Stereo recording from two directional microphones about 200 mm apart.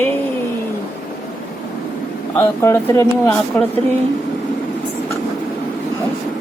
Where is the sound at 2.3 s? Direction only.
10° left (ahead or behind).